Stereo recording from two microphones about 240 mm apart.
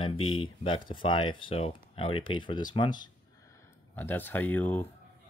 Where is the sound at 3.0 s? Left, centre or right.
Centre.